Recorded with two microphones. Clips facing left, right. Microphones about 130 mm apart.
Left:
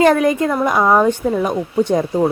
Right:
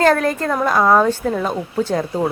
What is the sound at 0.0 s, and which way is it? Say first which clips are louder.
Speech: left 3 dB; 15° left (ahead or behind).